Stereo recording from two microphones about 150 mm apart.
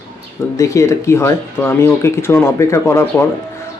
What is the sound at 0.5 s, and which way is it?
Speech, 20° left (ahead or behind).